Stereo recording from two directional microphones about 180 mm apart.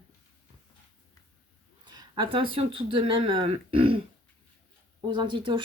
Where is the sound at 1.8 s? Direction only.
25° right (ahead or behind).